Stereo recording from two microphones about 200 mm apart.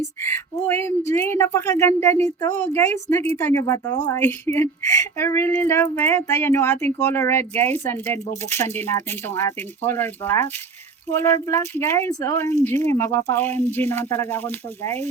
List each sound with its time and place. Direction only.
0.3 s speech: 10° left (ahead or behind)